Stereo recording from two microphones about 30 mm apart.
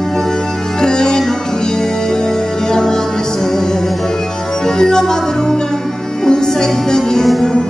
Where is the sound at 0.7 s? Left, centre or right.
Left.